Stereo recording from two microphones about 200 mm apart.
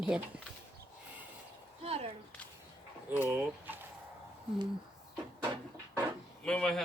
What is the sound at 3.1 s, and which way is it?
Speech, 10° right (ahead or behind).